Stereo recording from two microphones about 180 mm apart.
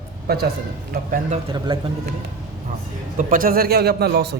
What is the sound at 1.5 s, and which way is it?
Speech, 25° right (ahead or behind).